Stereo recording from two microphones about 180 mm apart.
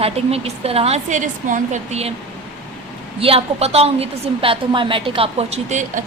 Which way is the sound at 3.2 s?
35° right (ahead or behind).